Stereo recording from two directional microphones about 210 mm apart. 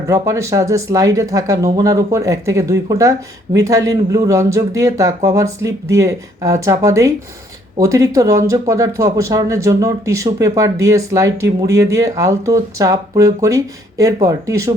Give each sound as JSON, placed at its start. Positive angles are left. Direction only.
{"t": 0.1, "sound": "speech", "side_deg": -15}